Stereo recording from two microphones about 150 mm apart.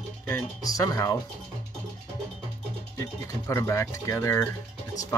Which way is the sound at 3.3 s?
15° left (ahead or behind).